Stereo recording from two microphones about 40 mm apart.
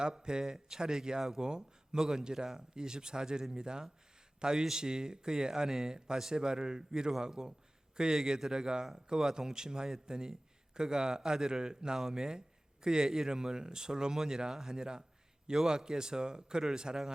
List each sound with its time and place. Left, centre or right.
0.0 s a man's voice: centre